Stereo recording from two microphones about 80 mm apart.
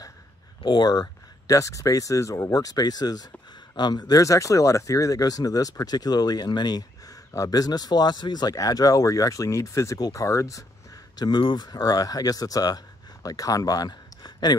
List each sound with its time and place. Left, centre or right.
0.7 s speech: left
1.0 s speech: left
4.2 s speech: left
7.3 s speech: left
11.1 s speech: left